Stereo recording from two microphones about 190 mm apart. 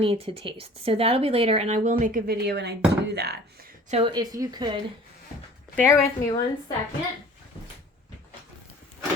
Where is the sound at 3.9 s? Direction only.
30° right (ahead or behind).